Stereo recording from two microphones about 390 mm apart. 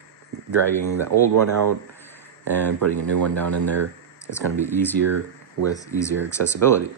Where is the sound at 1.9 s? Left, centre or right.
Centre.